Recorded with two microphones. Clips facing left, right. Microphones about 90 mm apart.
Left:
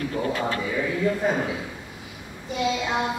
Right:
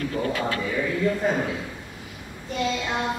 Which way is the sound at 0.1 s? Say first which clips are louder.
Even; 20° left (ahead or behind).